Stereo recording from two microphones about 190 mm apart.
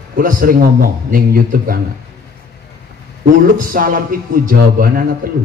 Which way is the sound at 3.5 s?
45° right (ahead or behind).